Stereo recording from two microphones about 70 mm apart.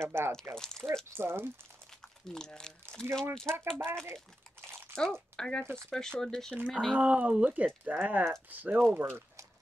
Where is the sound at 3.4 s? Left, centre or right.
Right.